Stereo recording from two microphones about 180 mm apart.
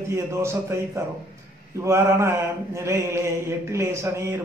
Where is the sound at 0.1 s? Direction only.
15° right (ahead or behind).